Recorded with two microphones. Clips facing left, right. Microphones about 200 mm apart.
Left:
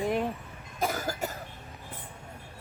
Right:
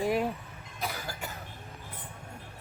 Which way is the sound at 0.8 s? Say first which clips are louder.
Left 7 dB; 45° left (ahead or behind).